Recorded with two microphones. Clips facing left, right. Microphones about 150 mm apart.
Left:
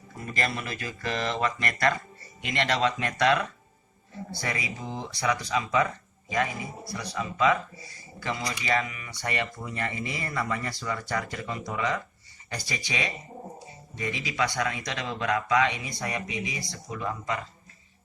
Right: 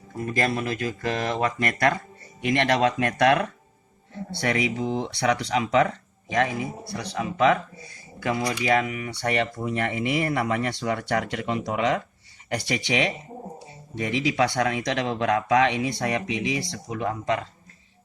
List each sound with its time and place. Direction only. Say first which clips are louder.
0.2 s speech: right 6 dB; 50° right (ahead or behind)
4.1 s speech: right 7 dB; 65° right (ahead or behind)
4.8 s speech: right 9 dB; 20° right (ahead or behind)
5.0 s speech: right 4 dB; 70° right (ahead or behind)